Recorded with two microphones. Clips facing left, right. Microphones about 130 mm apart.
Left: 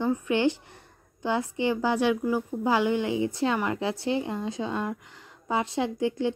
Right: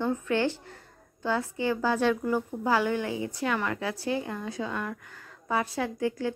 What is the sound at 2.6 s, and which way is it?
A woman's voice, 20° left (ahead or behind).